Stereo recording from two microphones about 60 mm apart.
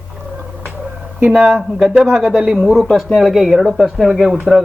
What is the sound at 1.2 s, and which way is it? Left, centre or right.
Speech, right.